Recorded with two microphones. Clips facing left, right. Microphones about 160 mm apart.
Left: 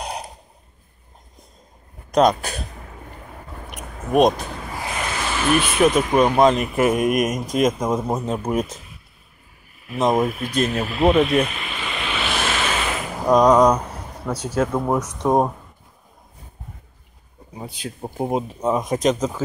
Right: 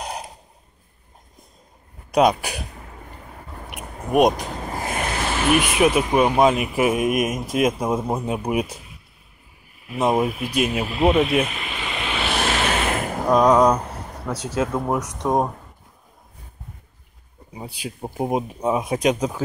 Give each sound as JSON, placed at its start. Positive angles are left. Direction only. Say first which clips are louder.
{"t": 0.0, "sound": "a sound", "louder": "left 1 dB", "side_deg": 0}
{"t": 2.0, "sound": "speech", "louder": "left 1 dB", "side_deg": -10}
{"t": 3.7, "sound": "a sound", "louder": "left 1 dB", "side_deg": -10}
{"t": 4.6, "sound": "vehicle", "louder": "right 2 dB", "side_deg": -45}
{"t": 5.5, "sound": "speech", "louder": "left 1 dB", "side_deg": -10}
{"t": 9.8, "sound": "speech", "louder": "left 1 dB", "side_deg": -10}
{"t": 11.6, "sound": "waves", "louder": "even", "side_deg": -20}
{"t": 12.6, "sound": "a sound", "louder": "right 2 dB", "side_deg": -50}
{"t": 13.3, "sound": "speech", "louder": "left 2 dB", "side_deg": -5}
{"t": 14.3, "sound": "speech", "louder": "left 2 dB", "side_deg": -20}
{"t": 15.2, "sound": "speech", "louder": "left 3 dB", "side_deg": 5}
{"t": 17.6, "sound": "speech", "louder": "even", "side_deg": -10}